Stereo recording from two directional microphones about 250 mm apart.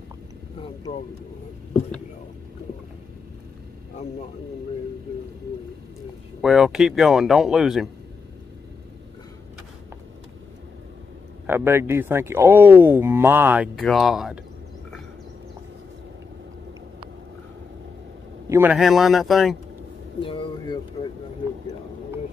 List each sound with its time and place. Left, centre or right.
6.4 s speech: centre
11.4 s speech: centre
18.5 s speech: centre
20.2 s speech: centre